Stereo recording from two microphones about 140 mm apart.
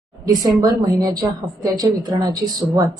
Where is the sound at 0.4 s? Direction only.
25° right (ahead or behind).